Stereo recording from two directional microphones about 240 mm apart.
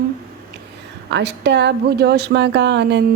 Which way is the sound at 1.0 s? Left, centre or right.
Right.